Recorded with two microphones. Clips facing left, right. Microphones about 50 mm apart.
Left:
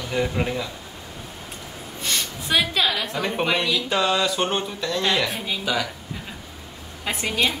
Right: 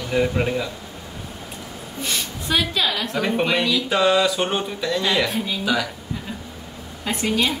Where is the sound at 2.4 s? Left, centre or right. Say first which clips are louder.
Even; centre.